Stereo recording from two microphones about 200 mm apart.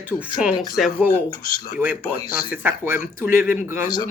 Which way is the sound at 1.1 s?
45° left (ahead or behind).